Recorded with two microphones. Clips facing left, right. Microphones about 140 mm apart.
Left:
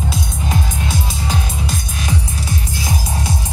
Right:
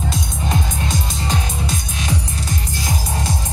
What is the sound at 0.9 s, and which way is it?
Music, 5° left (ahead or behind).